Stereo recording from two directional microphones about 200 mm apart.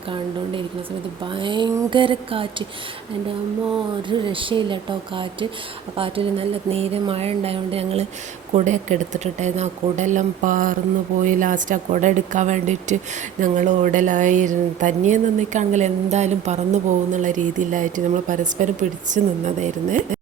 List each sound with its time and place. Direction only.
1.2 s speech: 25° right (ahead or behind)
4.1 s speech: 25° right (ahead or behind)